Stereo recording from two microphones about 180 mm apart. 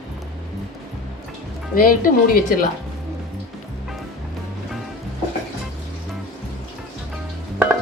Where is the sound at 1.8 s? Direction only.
50° left (ahead or behind).